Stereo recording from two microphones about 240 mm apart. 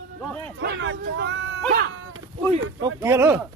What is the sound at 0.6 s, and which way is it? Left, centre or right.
Speech, right.